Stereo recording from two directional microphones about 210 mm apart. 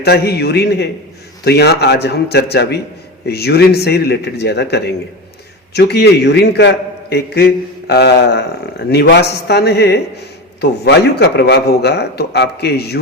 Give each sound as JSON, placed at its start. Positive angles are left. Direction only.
{"t": 0.0, "sound": "a man's voice", "side_deg": 50}